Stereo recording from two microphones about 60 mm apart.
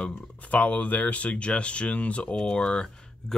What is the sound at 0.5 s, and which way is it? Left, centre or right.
Speech, left.